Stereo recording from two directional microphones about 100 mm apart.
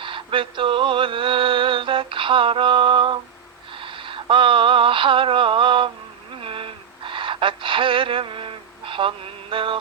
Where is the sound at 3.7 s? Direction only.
60° right (ahead or behind).